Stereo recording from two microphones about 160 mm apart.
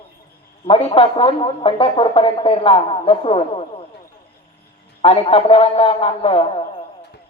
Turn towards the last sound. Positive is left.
turn(degrees=35)  # may be behind; listen again after turning